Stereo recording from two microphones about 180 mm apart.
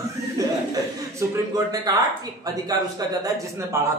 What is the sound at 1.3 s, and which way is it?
A man's voice, 20° right (ahead or behind).